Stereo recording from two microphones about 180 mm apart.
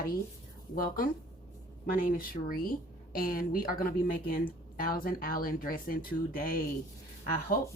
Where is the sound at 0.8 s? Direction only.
50° left (ahead or behind).